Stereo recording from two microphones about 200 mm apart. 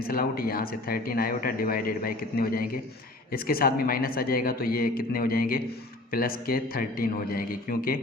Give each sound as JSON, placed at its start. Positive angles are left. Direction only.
{"t": 0.0, "sound": "speech", "side_deg": 50}